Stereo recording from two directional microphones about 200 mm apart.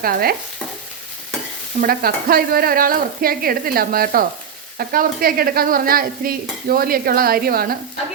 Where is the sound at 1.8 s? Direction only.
50° right (ahead or behind).